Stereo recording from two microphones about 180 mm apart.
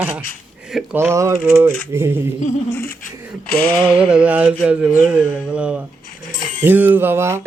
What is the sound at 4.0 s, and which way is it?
Speech, 5° right (ahead or behind).